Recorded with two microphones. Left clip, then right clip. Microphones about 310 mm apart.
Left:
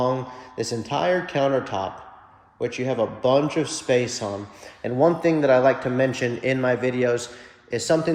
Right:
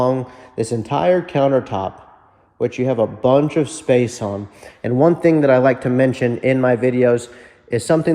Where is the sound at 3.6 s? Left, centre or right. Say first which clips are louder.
Right 5 dB; right.